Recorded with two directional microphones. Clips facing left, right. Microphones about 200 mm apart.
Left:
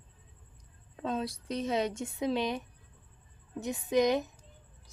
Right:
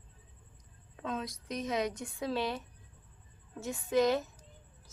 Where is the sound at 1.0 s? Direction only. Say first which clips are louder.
Left 4 dB; 30° left (ahead or behind).